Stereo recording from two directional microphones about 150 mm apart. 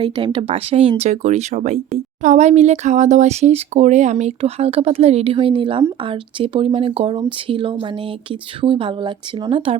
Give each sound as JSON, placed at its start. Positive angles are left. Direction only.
{"t": 0.0, "sound": "speech", "side_deg": -35}